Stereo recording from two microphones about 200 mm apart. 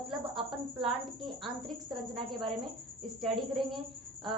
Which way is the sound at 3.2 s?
Centre (ahead or behind).